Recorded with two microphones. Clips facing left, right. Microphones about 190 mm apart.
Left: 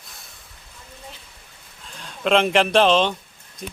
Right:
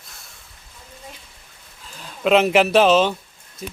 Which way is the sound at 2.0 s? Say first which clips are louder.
Right 3 dB; 5° right (ahead or behind).